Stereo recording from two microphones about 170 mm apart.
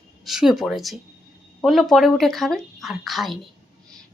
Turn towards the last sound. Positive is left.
turn(degrees=0)  # may be behind; listen again after turning